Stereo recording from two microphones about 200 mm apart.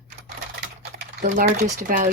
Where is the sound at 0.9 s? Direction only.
55° right (ahead or behind).